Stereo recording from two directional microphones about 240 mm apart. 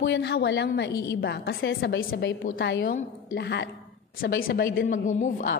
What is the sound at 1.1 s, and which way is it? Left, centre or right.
A woman's voice, left.